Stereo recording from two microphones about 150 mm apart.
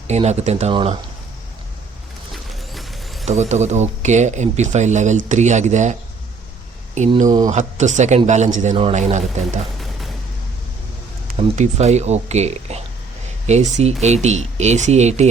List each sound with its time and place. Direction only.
0.1 s speech: 45° right (ahead or behind)
0.7 s speech: 35° right (ahead or behind)
2.3 s music: centre (ahead or behind)
3.2 s speech: 50° right (ahead or behind)
7.3 s speech: 25° right (ahead or behind)
7.5 s speech: 50° right (ahead or behind)
11.3 s speech: 50° right (ahead or behind)